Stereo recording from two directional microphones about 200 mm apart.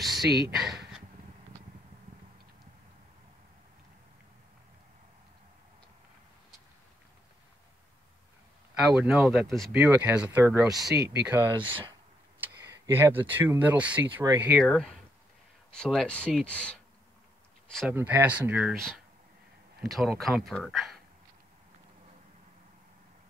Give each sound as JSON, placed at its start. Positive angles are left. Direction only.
{"t": 0.0, "sound": "a sound", "side_deg": 0}
{"t": 8.7, "sound": "speech", "side_deg": -5}
{"t": 14.6, "sound": "speech", "side_deg": 0}
{"t": 17.7, "sound": "speech", "side_deg": -5}